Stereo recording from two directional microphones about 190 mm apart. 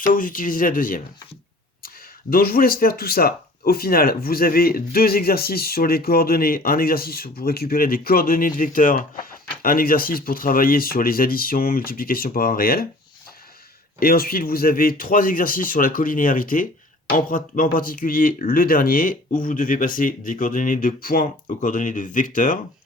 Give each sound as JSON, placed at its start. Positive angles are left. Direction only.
{"t": 0.0, "sound": "speech", "side_deg": 45}
{"t": 2.3, "sound": "speech", "side_deg": 50}
{"t": 14.0, "sound": "speech", "side_deg": 50}